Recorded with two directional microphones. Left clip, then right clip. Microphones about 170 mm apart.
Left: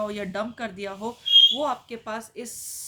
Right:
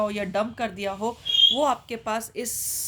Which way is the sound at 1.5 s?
45° right (ahead or behind).